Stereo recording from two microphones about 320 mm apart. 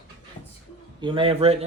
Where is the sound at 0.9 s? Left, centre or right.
Centre.